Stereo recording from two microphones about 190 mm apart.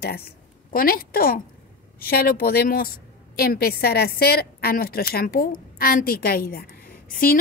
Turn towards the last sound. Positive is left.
turn(degrees=50)  # may be behind; listen again after turning